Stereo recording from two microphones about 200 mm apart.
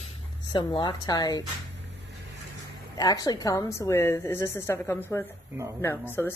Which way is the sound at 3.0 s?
20° left (ahead or behind).